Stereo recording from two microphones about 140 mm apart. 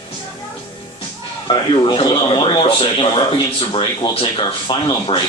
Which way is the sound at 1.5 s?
35° left (ahead or behind).